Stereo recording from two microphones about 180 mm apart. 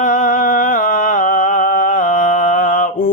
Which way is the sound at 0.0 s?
45° left (ahead or behind).